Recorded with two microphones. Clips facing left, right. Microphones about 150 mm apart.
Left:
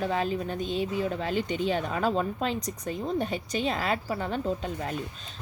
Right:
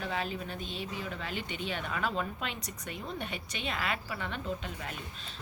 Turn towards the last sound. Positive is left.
turn(degrees=40)  # may be behind; listen again after turning